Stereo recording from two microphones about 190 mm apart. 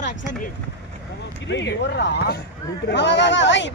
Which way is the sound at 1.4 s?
70° left (ahead or behind).